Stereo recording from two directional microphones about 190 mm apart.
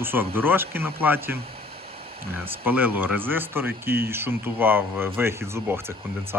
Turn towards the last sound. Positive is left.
turn(degrees=-15)  # may be behind; listen again after turning